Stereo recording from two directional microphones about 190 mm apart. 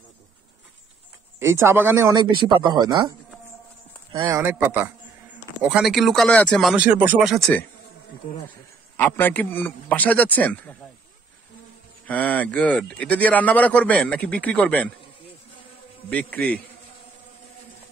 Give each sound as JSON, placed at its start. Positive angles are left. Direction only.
{"t": 1.4, "sound": "speech", "side_deg": -15}
{"t": 4.1, "sound": "speech", "side_deg": -25}
{"t": 4.4, "sound": "a man's voice", "side_deg": -15}
{"t": 6.7, "sound": "speech", "side_deg": -10}
{"t": 8.9, "sound": "speech", "side_deg": 10}
{"t": 12.1, "sound": "speech", "side_deg": 10}
{"t": 16.1, "sound": "speech", "side_deg": 10}